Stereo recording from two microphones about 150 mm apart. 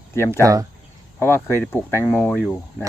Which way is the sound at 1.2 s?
15° left (ahead or behind).